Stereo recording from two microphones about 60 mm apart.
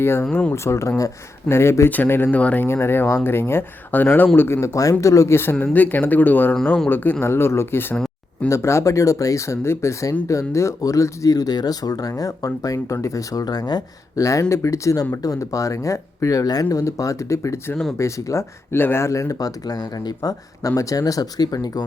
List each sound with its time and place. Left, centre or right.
0.0 s speech: left
1.5 s speech: left
1.9 s speech: left
2.3 s speech: left
2.6 s speech: left
4.6 s speech: left
5.3 s speech: left
12.6 s speech: left
18.7 s speech: left
19.0 s speech: left